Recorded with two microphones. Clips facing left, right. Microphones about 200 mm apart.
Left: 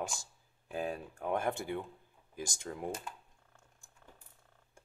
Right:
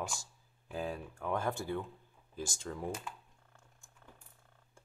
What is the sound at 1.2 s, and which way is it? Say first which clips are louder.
Speech: left 1 dB; 20° left (ahead or behind).